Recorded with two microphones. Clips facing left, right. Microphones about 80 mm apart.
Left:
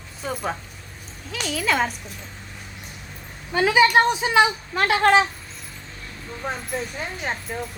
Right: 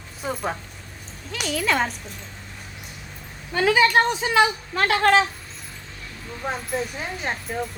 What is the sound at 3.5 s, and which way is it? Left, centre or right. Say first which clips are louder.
Speech: left 1 dB; centre.